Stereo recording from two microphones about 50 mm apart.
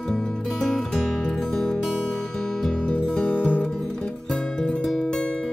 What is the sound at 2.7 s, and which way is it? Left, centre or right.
Music, left.